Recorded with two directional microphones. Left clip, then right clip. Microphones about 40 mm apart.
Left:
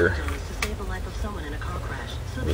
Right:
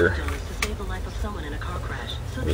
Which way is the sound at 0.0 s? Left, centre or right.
Right.